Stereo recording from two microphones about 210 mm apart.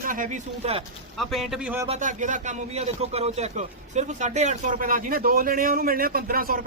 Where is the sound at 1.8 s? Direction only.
35° right (ahead or behind).